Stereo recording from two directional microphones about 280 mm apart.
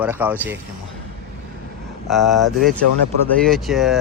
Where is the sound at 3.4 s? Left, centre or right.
Centre.